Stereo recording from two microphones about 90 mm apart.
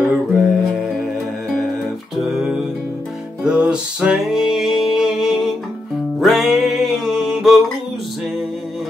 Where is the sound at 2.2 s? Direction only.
5° right (ahead or behind).